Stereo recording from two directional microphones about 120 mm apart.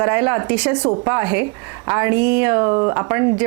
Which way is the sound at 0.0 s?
20° right (ahead or behind).